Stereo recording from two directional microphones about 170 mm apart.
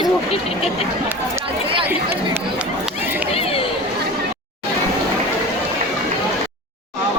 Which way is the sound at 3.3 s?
35° left (ahead or behind).